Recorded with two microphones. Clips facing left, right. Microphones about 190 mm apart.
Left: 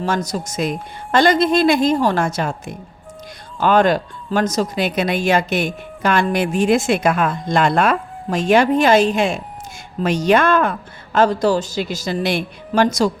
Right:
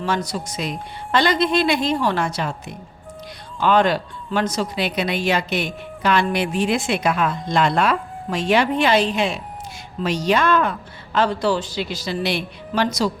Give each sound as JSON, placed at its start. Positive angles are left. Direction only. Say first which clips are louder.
{"t": 0.0, "sound": "a woman's voice", "louder": "left 2 dB", "side_deg": 45}